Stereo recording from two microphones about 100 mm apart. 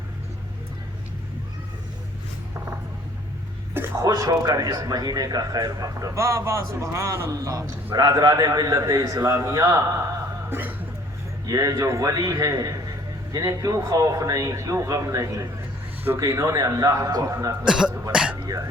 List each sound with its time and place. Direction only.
4.0 s a man's voice: 40° right (ahead or behind); by 10.8 s 20° right (ahead or behind)
11.4 s a man's voice: 35° right (ahead or behind)
17.7 s speech: 5° right (ahead or behind)